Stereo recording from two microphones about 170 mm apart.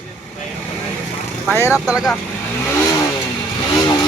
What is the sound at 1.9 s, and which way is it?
Speech, centre (ahead or behind).